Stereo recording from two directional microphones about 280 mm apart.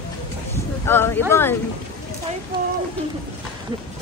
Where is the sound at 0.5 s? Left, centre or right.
Centre.